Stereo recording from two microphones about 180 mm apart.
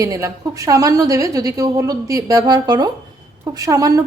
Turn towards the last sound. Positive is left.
turn(degrees=-20)  # may be behind; listen again after turning